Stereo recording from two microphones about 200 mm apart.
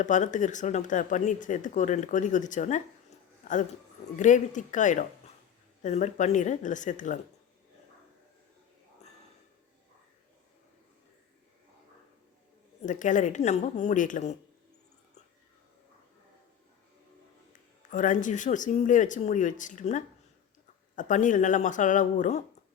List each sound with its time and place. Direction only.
0.0 s speech: 35° left (ahead or behind)
12.8 s speech: 40° left (ahead or behind)
17.9 s speech: 40° left (ahead or behind)